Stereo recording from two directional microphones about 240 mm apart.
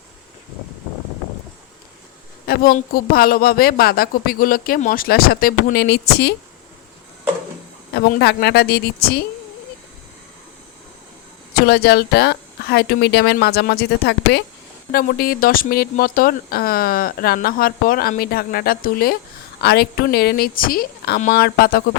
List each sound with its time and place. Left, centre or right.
2.5 s speech: left
7.9 s speech: left
11.5 s speech: left